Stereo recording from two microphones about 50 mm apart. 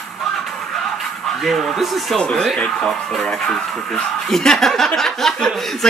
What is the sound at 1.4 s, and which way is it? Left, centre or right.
Speech, centre.